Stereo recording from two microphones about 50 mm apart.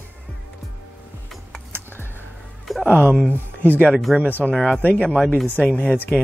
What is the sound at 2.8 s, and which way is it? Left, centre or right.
Speech, right.